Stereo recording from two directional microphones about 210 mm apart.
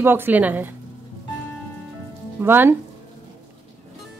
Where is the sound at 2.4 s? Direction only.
10° right (ahead or behind).